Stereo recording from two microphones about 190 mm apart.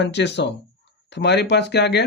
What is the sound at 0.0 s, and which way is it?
Speech, 65° left (ahead or behind).